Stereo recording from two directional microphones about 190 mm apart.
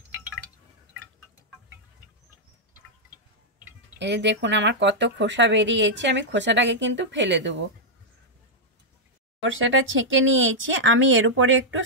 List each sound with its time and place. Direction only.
4.0 s speech: 70° right (ahead or behind)
9.4 s speech: 90° right